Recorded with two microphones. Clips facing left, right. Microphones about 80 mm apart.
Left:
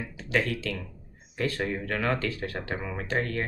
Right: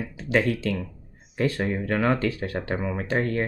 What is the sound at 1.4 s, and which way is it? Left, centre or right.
Speech, centre.